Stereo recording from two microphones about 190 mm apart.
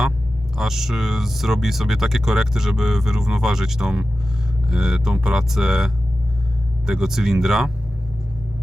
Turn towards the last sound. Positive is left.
turn(degrees=0)  # may be behind; listen again after turning